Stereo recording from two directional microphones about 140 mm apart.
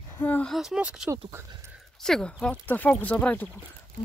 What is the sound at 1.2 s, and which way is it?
Speech, 25° right (ahead or behind).